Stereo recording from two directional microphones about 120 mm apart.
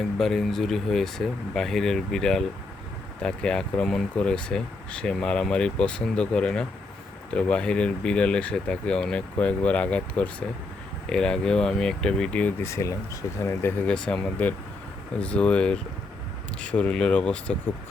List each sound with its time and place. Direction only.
0.2 s speech: 5° left (ahead or behind)
12.6 s speech: 25° left (ahead or behind)
13.9 s speech: 5° left (ahead or behind)